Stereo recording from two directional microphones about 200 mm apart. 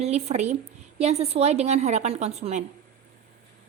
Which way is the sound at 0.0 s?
35° right (ahead or behind).